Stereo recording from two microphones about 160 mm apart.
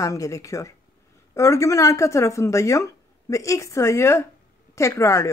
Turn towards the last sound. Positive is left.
turn(degrees=20)  # may be behind; listen again after turning